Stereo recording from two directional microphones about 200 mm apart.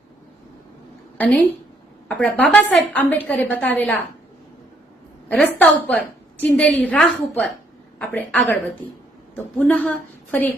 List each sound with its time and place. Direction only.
1.2 s a woman's voice: 10° left (ahead or behind)
5.3 s a woman's voice: 10° left (ahead or behind)